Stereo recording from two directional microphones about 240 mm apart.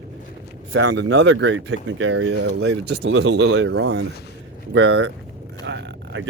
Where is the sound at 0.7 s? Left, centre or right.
Right.